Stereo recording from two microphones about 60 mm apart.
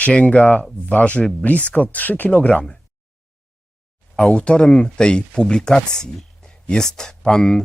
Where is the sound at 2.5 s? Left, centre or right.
Centre.